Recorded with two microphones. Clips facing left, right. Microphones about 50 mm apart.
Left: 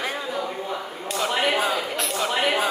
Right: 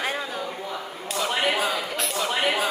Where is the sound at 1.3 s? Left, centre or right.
Centre.